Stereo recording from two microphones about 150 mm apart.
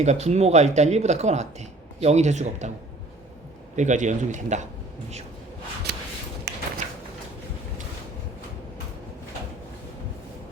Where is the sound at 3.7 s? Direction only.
55° right (ahead or behind).